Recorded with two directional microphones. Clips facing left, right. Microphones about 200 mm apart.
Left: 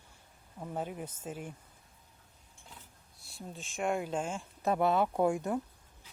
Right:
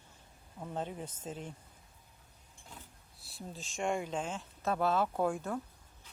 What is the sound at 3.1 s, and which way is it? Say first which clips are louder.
A woman's voice: left 1 dB; centre (ahead or behind).